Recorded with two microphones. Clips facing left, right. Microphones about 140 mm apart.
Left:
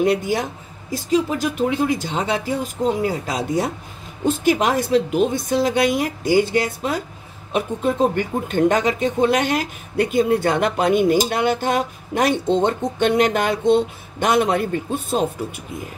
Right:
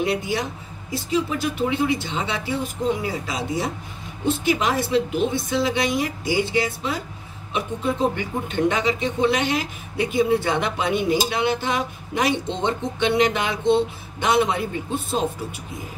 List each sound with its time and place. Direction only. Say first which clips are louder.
0.0 s speech: left 5 dB; 45° left (ahead or behind)